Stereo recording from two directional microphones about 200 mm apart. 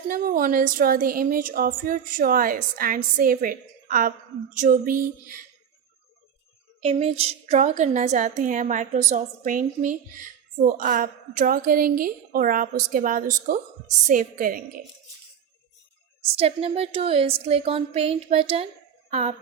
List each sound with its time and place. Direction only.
0.1 s a woman's voice: 45° right (ahead or behind)
6.8 s a woman's voice: 30° right (ahead or behind)
16.3 s speech: 30° right (ahead or behind)